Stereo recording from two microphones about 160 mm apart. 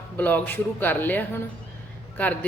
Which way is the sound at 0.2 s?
10° left (ahead or behind).